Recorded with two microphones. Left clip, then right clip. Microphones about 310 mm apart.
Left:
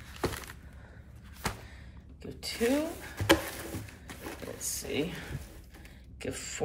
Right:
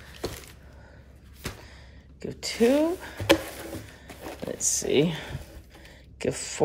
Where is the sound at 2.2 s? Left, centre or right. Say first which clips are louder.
Right 6 dB; right.